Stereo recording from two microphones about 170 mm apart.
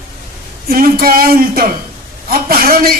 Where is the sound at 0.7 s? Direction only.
60° right (ahead or behind).